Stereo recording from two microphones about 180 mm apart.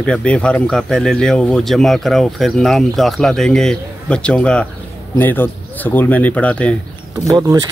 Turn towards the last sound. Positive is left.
turn(degrees=-20)  # may be behind; listen again after turning